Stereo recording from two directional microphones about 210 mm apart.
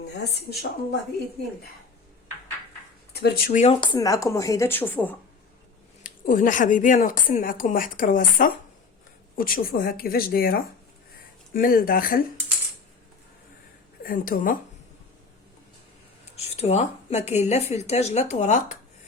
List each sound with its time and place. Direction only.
0.3 s speech: 50° left (ahead or behind)
3.1 s speech: 50° left (ahead or behind); by 5.1 s 10° left (ahead or behind)
6.0 s speech: 40° left (ahead or behind)
14.0 s speech: 40° left (ahead or behind)
16.4 s speech: 30° left (ahead or behind)